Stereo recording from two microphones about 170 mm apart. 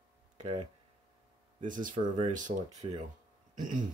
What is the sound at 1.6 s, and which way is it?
Speech, 50° right (ahead or behind).